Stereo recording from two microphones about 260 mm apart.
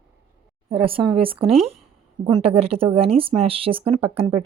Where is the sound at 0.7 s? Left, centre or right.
Right.